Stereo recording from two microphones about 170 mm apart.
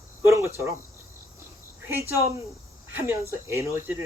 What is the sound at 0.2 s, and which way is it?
Cricket, 15° right (ahead or behind).